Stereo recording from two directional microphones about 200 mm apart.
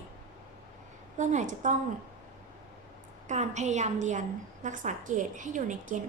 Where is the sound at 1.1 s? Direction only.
35° right (ahead or behind).